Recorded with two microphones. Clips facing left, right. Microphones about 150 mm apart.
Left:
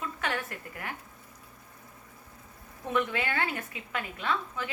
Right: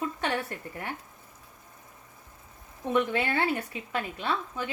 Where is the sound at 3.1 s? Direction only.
30° right (ahead or behind).